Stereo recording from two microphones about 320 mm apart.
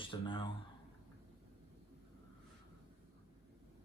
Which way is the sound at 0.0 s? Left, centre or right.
Centre.